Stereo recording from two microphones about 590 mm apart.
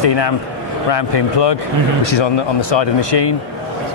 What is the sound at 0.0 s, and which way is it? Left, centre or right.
Speech, left.